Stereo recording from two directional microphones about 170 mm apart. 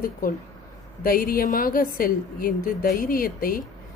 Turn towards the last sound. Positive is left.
turn(degrees=55)  # may be behind; listen again after turning